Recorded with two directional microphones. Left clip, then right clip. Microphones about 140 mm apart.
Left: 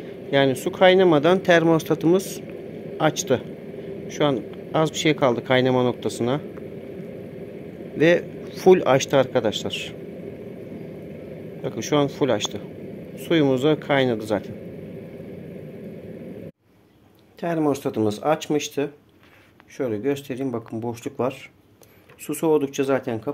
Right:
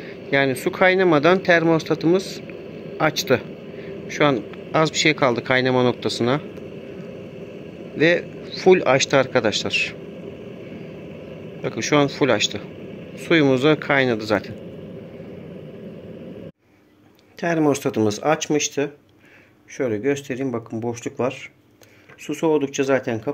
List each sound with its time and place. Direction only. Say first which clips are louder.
0.0 s speech: even; 5° left (ahead or behind)
1.4 s speech: even; 25° left (ahead or behind)
3.0 s speech: right 2 dB; 15° left (ahead or behind)
8.0 s speech: even; 25° left (ahead or behind)
11.6 s speech: right 3 dB; 10° left (ahead or behind)
17.4 s speech: right 3 dB; 5° right (ahead or behind)